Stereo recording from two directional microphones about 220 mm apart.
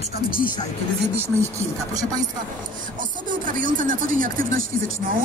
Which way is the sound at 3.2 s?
35° right (ahead or behind).